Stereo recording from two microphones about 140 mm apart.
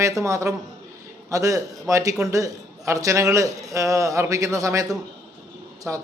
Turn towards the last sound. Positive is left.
turn(degrees=-20)  # may be behind; listen again after turning